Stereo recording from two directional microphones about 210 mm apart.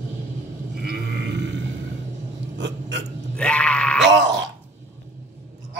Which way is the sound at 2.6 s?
60° right (ahead or behind).